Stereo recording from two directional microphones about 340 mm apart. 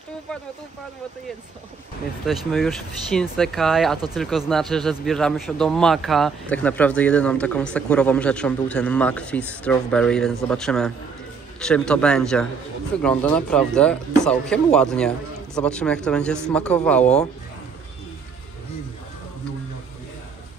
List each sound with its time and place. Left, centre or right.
2.2 s speech: centre
17.0 s speech: centre